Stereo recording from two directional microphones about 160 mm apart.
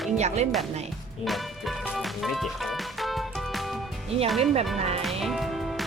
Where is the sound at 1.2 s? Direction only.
Centre (ahead or behind).